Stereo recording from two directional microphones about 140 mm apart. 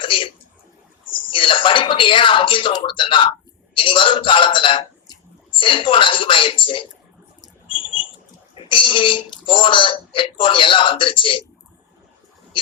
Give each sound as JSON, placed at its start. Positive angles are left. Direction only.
{"t": 0.0, "sound": "speech", "side_deg": 40}
{"t": 1.3, "sound": "speech", "side_deg": 40}
{"t": 8.5, "sound": "speech", "side_deg": 40}